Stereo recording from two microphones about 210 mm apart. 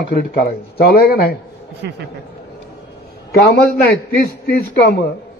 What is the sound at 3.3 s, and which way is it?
Speech, 45° left (ahead or behind).